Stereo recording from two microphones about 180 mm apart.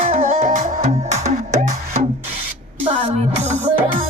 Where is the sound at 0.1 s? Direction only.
40° right (ahead or behind).